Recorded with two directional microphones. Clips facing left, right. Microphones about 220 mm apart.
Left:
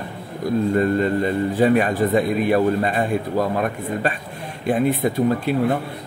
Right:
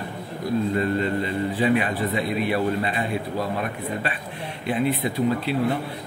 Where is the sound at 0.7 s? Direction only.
45° left (ahead or behind).